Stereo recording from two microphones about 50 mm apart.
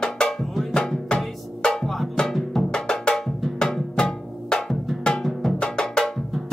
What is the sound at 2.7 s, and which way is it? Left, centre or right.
Percussion, centre.